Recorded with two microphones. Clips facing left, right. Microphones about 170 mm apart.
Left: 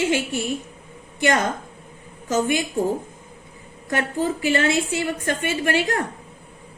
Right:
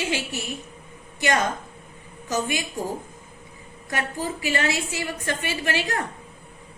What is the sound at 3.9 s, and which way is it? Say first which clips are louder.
A woman's voice: left 6 dB; 55° left (ahead or behind).